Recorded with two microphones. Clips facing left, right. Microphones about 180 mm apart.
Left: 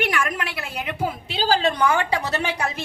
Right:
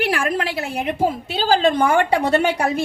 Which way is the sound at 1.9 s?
55° right (ahead or behind).